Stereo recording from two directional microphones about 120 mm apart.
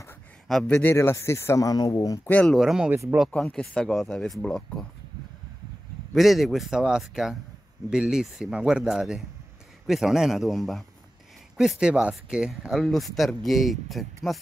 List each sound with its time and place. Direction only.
0.5 s a man's voice: centre (ahead or behind)
0.7 s speech: 20° left (ahead or behind)
2.2 s speech: 15° left (ahead or behind)
2.5 s speech: 5° right (ahead or behind)
2.9 s speech: 15° right (ahead or behind)
3.3 s speech: 10° left (ahead or behind)
6.1 s speech: centre (ahead or behind)